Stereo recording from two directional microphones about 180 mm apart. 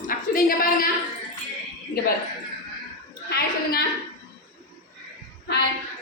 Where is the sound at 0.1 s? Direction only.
50° left (ahead or behind).